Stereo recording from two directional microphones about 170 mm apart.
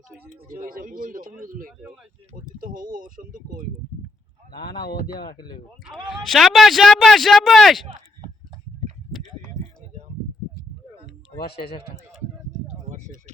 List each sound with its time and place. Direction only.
0.4 s a man's voice: 55° right (ahead or behind)
2.7 s a man's voice: 55° right (ahead or behind)
4.6 s speech: 20° left (ahead or behind)
4.9 s speech: 70° left (ahead or behind)
5.8 s speech: centre (ahead or behind)
12.9 s a sound: 45° right (ahead or behind)